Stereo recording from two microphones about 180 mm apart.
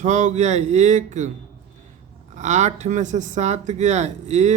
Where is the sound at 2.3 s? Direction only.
40° right (ahead or behind).